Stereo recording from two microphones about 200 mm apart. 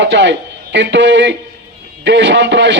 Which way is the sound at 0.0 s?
65° right (ahead or behind).